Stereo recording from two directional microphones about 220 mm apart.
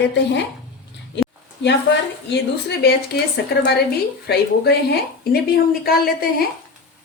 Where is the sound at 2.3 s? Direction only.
50° left (ahead or behind).